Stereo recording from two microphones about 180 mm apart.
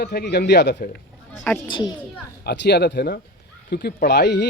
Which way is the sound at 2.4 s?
65° left (ahead or behind).